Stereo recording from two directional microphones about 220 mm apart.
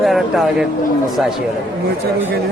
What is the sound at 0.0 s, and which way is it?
Speech, centre (ahead or behind).